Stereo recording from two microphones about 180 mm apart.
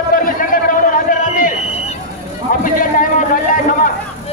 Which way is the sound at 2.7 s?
50° left (ahead or behind).